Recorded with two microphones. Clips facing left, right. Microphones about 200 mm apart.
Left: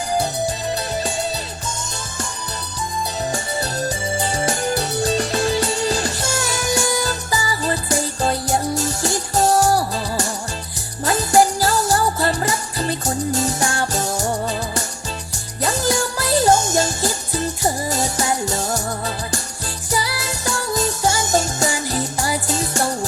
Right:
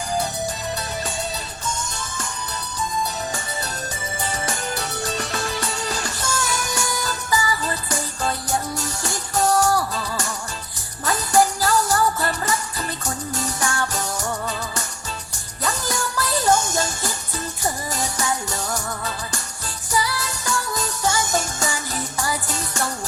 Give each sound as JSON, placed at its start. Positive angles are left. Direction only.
{"t": 3.3, "sound": "music", "side_deg": 35}